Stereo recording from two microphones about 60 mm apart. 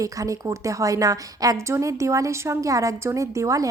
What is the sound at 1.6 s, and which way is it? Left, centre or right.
A woman's voice, right.